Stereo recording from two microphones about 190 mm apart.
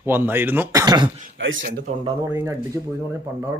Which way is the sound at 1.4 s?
85° right.